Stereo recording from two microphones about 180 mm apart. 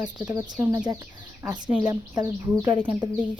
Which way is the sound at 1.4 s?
25° right (ahead or behind).